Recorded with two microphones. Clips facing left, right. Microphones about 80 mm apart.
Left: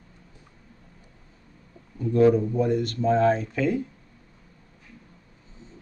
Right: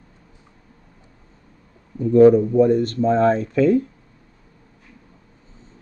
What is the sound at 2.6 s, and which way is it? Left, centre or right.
Speech, right.